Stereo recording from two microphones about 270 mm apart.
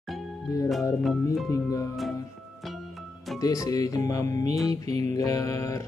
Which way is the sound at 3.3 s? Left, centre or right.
Centre.